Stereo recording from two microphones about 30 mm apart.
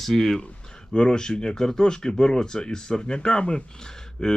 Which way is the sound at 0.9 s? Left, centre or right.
Left.